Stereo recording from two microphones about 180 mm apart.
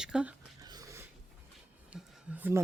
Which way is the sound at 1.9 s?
10° right (ahead or behind).